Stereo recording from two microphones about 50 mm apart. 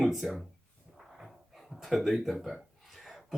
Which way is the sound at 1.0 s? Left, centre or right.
Centre.